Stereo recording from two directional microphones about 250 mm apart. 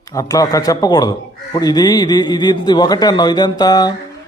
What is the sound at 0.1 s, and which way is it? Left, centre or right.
A man's voice, centre.